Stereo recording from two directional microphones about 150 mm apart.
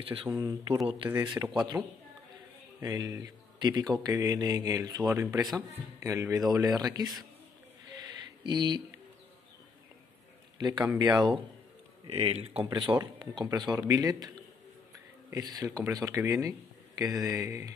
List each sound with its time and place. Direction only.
0.0 s speech: 40° right (ahead or behind)
0.3 s speech: 25° right (ahead or behind)
2.8 s speech: 25° right (ahead or behind)
8.5 s speech: 30° right (ahead or behind)
10.6 s speech: 25° right (ahead or behind)
12.1 s speech: 45° right (ahead or behind)
12.6 s speech: 30° right (ahead or behind)